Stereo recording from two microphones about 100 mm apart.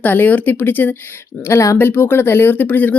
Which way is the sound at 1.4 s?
30° left (ahead or behind).